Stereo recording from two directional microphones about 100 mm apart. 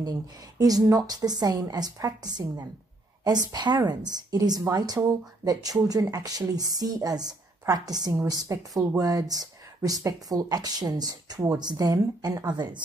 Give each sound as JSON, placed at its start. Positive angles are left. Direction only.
{"t": 0.0, "sound": "speech", "side_deg": -40}